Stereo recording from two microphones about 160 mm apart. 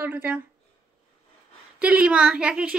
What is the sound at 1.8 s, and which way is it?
Speech, 5° right (ahead or behind).